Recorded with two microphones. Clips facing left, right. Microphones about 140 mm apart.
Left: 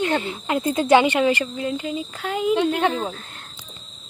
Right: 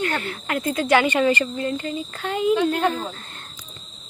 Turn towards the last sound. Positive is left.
turn(degrees=0)  # may be behind; listen again after turning